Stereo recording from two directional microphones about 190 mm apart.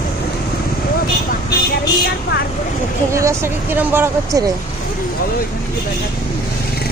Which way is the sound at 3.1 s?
15° right (ahead or behind).